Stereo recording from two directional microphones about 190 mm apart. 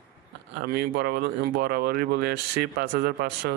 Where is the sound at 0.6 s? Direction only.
55° right (ahead or behind).